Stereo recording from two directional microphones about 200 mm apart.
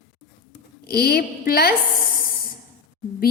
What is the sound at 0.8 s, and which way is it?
Speech, 50° left (ahead or behind).